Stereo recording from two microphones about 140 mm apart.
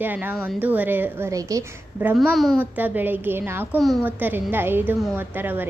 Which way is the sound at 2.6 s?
10° right (ahead or behind).